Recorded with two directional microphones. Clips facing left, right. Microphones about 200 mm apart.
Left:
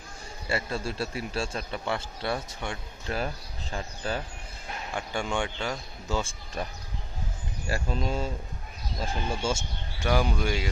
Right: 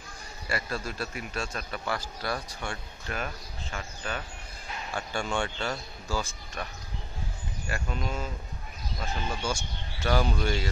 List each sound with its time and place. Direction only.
0.5 s a man's voice: 25° left (ahead or behind)
3.2 s speech: 30° left (ahead or behind)
4.9 s a man's voice: 15° left (ahead or behind)
10.0 s speech: 10° left (ahead or behind)